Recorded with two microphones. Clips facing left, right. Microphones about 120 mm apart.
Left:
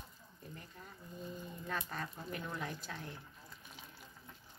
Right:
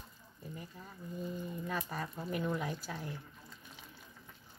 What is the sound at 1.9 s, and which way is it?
Speech, 10° right (ahead or behind).